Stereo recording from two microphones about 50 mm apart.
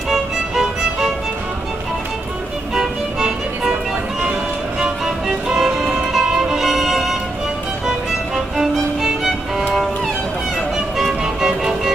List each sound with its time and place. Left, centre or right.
0.1 s music: centre
2.7 s music: centre
4.7 s music: centre
8.5 s music: centre
11.0 s music: centre